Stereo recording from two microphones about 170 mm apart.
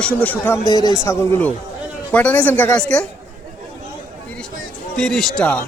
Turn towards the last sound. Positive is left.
turn(degrees=5)  # may be behind; listen again after turning